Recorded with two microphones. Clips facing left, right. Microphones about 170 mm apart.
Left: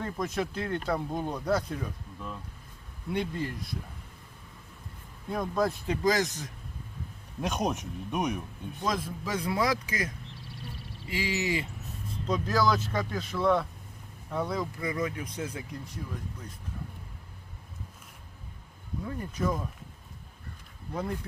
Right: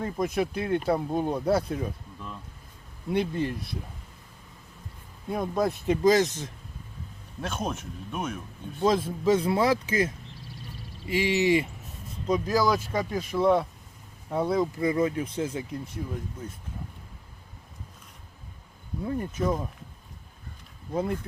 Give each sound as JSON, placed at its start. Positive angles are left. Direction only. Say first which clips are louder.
{"t": 0.0, "sound": "speech", "louder": "right 4 dB", "side_deg": -15}
{"t": 3.1, "sound": "speech", "louder": "right 5 dB", "side_deg": -25}
{"t": 5.3, "sound": "speech", "louder": "right 2 dB", "side_deg": -25}
{"t": 7.4, "sound": "speech", "louder": "left 2 dB", "side_deg": 15}
{"t": 8.8, "sound": "speech", "louder": "right 8 dB", "side_deg": -25}
{"t": 10.5, "sound": "quack", "louder": "left 1 dB", "side_deg": 65}
{"t": 11.0, "sound": "speech", "louder": "right 7 dB", "side_deg": -20}
{"t": 19.0, "sound": "speech", "louder": "right 4 dB", "side_deg": -25}
{"t": 20.9, "sound": "speech", "louder": "right 5 dB", "side_deg": -25}